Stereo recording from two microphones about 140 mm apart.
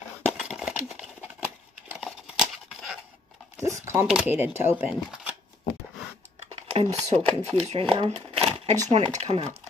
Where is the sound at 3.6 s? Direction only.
20° right (ahead or behind).